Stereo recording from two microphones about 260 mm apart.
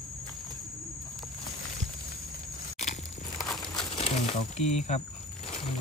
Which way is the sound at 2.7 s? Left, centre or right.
Left.